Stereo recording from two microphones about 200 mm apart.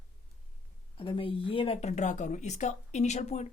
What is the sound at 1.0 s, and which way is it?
Speech, 25° left (ahead or behind).